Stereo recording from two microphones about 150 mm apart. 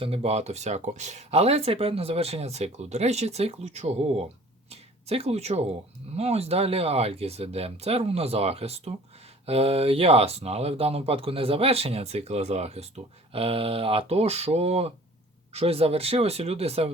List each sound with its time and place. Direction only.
0.0 s speech: 40° right (ahead or behind)